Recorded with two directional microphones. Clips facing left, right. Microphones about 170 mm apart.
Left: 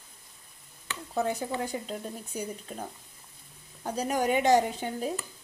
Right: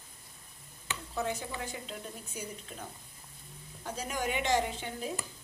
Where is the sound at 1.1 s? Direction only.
40° left (ahead or behind).